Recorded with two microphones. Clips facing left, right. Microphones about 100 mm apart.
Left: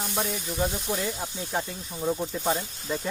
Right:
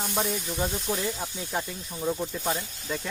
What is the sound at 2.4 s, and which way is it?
Speech, 25° left (ahead or behind).